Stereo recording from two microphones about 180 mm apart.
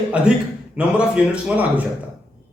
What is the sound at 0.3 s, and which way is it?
A man's voice, 5° right (ahead or behind).